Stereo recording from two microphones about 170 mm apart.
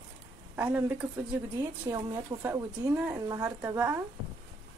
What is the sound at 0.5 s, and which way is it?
A woman's voice, 10° right (ahead or behind).